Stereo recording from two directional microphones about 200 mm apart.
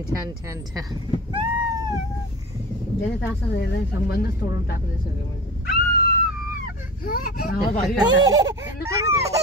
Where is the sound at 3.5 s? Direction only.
55° left (ahead or behind).